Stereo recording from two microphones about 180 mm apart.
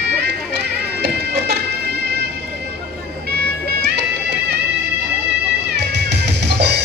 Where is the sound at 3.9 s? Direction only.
70° right (ahead or behind).